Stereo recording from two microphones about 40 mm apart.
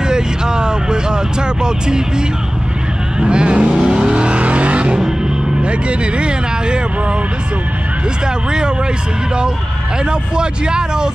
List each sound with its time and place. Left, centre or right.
0.1 s vehicle: centre
3.2 s vehicle: right
4.4 s vehicle: right
5.6 s speech: right
10.3 s speech: right